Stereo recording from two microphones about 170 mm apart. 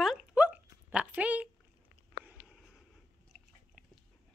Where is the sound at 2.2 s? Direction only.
5° right (ahead or behind).